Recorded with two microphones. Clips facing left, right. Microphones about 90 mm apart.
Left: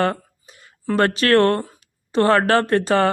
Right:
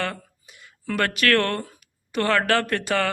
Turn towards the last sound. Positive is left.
turn(degrees=35)  # may be behind; listen again after turning